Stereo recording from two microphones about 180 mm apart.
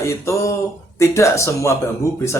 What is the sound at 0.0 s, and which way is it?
Speech, 15° left (ahead or behind).